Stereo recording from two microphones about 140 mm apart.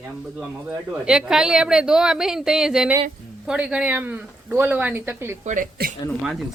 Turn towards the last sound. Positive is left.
turn(degrees=0)  # may be behind; listen again after turning